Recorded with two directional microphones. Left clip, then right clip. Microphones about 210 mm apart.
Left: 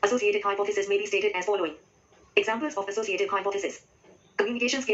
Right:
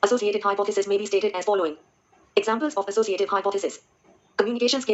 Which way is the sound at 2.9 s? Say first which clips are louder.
Right 5 dB; 55° right (ahead or behind).